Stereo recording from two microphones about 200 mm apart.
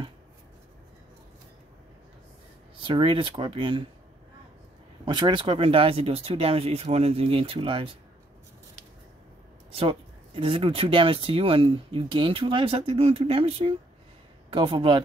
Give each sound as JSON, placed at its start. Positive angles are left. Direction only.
{"t": 2.8, "sound": "speech", "side_deg": -25}
{"t": 5.0, "sound": "speech", "side_deg": -20}
{"t": 9.7, "sound": "speech", "side_deg": -25}